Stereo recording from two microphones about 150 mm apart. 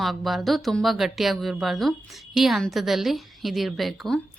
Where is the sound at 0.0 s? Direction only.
Centre (ahead or behind).